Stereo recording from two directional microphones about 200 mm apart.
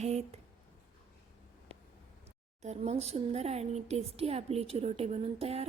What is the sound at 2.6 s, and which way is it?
Speech, 35° right (ahead or behind).